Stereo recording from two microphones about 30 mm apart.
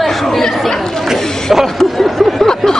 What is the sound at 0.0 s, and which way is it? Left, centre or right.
Chatter, centre.